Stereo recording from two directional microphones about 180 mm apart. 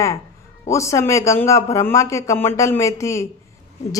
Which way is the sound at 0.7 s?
15° left (ahead or behind).